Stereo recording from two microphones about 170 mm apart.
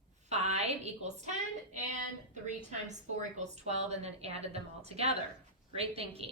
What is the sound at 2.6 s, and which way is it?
A woman's voice, 45° right (ahead or behind).